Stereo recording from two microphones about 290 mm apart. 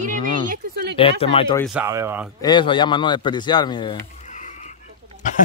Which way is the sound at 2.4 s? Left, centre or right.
Centre.